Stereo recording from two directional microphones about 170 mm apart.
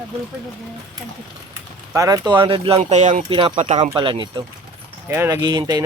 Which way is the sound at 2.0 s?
20° right (ahead or behind).